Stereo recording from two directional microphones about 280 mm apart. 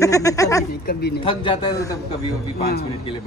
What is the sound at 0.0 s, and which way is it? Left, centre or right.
Speech, centre.